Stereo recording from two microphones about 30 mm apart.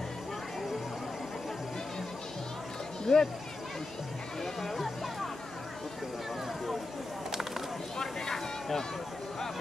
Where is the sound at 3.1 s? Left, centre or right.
Centre.